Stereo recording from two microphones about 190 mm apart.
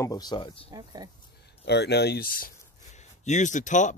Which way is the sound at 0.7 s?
20° right (ahead or behind).